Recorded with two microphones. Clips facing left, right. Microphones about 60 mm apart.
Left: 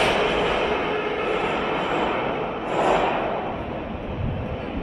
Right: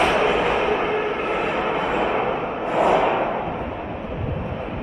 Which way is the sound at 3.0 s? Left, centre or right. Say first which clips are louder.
Right 3 dB; right.